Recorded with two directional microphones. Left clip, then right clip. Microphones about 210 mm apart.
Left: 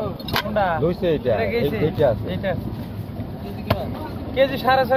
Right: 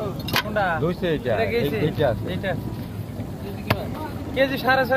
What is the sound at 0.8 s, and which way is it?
Speech, 20° left (ahead or behind).